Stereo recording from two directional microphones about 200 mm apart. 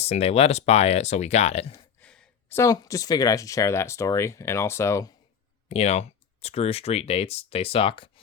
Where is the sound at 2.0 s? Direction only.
10° left (ahead or behind).